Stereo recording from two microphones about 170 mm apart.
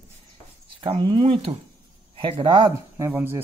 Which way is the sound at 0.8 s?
30° right (ahead or behind).